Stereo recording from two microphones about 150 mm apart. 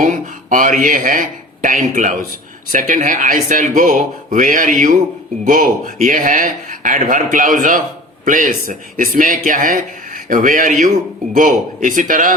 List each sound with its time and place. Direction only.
0.0 s speech: 60° right (ahead or behind)